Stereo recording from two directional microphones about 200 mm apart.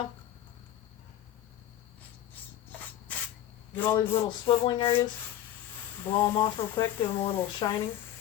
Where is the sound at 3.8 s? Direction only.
10° left (ahead or behind).